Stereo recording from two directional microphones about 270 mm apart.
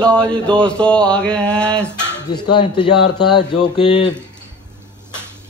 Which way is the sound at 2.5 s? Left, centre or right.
Centre.